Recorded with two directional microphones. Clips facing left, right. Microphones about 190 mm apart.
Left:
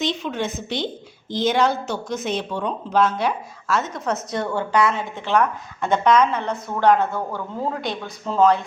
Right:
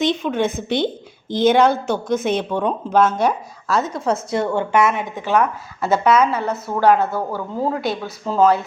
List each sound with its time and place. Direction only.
0.0 s a woman's voice: 55° right (ahead or behind); by 8.6 s 5° right (ahead or behind)